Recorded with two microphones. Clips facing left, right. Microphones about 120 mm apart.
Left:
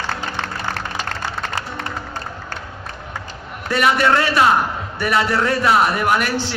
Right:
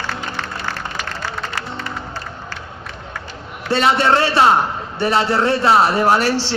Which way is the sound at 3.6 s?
30° right (ahead or behind).